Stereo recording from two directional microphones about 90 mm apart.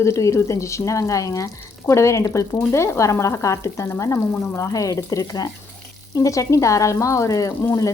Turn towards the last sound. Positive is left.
turn(degrees=30)  # may be behind; listen again after turning